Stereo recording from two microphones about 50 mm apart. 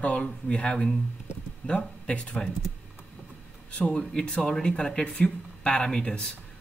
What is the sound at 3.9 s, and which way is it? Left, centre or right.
Speech, centre.